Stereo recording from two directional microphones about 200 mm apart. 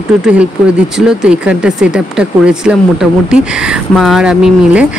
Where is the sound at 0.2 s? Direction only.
5° right (ahead or behind).